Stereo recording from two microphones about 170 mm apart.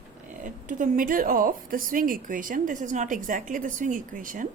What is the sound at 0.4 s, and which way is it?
A woman's voice, 50° right (ahead or behind).